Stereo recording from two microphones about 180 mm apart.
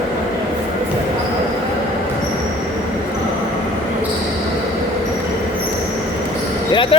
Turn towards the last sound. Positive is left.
turn(degrees=30)  # may be behind; listen again after turning